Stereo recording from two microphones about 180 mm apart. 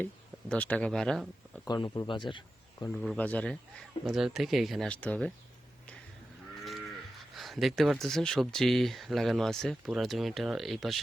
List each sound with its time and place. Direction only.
0.0 s speech: 10° left (ahead or behind)
1.6 s speech: 25° left (ahead or behind)
2.9 s speech: centre (ahead or behind)
7.3 s speech: centre (ahead or behind)